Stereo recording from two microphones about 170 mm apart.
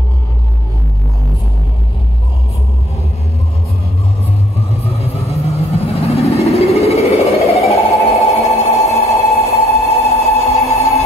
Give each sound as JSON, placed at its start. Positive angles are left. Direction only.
{"t": 5.3, "sound": "vehicle", "side_deg": 35}
{"t": 8.7, "sound": "a sound", "side_deg": 40}
{"t": 9.7, "sound": "music", "side_deg": 35}